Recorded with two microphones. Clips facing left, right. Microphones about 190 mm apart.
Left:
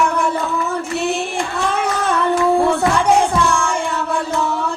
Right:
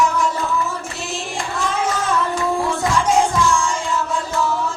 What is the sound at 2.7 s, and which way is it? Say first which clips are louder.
Music: left 3 dB; 60° left (ahead or behind).